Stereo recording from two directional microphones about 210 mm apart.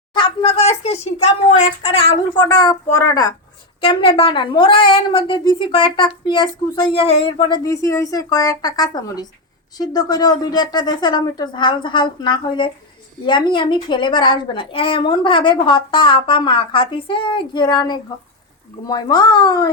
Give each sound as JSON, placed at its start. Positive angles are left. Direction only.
{"t": 0.1, "sound": "a woman's voice", "side_deg": 25}